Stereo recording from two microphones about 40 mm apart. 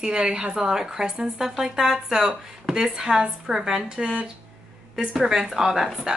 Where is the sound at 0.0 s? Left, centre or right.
Right.